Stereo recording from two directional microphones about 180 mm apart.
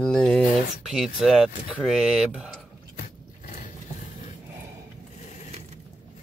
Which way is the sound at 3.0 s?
45° left (ahead or behind).